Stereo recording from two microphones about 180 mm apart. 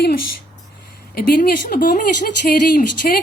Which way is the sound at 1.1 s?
55° left (ahead or behind).